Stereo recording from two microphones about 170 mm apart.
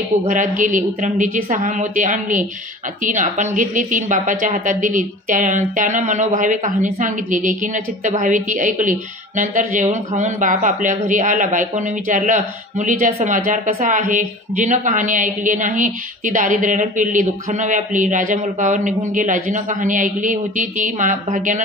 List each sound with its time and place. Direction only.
0.3 s a man's voice: 50° right (ahead or behind)